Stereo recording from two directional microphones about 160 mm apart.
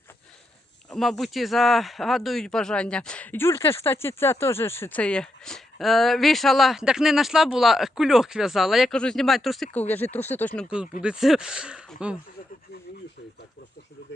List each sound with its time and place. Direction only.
0.9 s speech: centre (ahead or behind)
9.7 s speech: 10° left (ahead or behind)
11.0 s speech: 5° right (ahead or behind)